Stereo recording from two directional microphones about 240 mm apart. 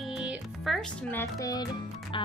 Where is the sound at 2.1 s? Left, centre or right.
Left.